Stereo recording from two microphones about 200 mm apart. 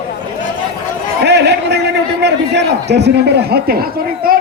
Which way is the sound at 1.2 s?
55° right (ahead or behind).